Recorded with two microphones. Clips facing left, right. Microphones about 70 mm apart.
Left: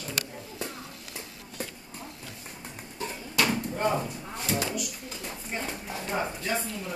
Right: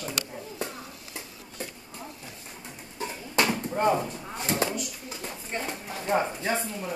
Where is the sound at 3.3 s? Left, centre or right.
Right.